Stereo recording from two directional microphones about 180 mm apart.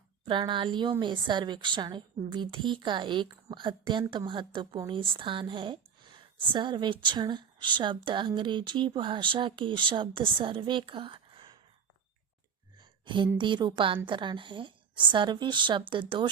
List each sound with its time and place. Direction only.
0.3 s a woman's voice: 25° right (ahead or behind)
12.7 s a sound: 25° right (ahead or behind)
13.4 s a woman's voice: 25° right (ahead or behind)